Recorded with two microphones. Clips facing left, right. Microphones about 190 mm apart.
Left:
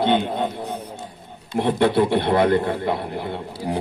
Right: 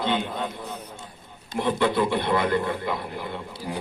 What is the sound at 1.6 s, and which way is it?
A man's voice, 55° left (ahead or behind).